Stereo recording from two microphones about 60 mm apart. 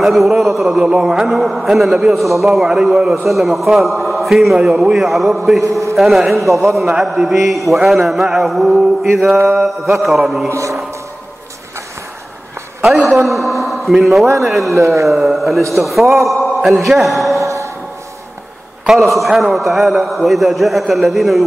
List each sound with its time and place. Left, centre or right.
0.0 s a man's voice: centre
0.7 s a man's voice: centre
4.6 s a man's voice: centre
5.6 s a man's voice: right
5.9 s a man's voice: centre
10.0 s a man's voice: centre
10.5 s speech: right
12.8 s a man's voice: centre
17.4 s music: right
18.9 s a man's voice: centre